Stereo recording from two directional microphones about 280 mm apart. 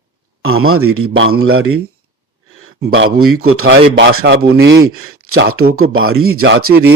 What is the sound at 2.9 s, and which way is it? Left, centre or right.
Speech, right.